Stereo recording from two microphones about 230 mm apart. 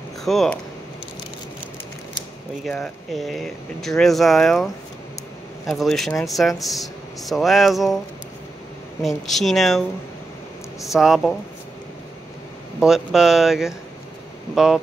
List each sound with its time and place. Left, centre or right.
0.2 s speech: centre
2.6 s speech: centre
5.7 s speech: centre
9.0 s speech: centre
10.9 s speech: centre
12.8 s speech: centre